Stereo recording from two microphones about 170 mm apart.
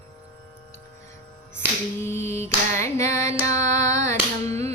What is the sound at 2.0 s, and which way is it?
A woman's voice, 15° left (ahead or behind).